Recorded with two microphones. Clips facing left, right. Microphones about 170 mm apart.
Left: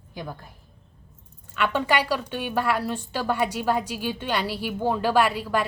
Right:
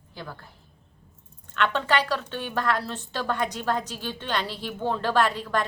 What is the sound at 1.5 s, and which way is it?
A woman's voice, 10° left (ahead or behind).